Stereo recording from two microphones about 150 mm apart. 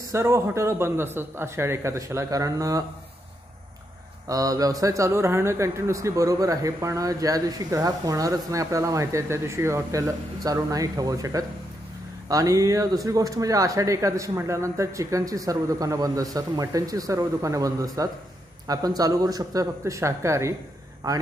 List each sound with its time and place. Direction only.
0.1 s speech: 20° right (ahead or behind)
4.3 s speech: 25° right (ahead or behind)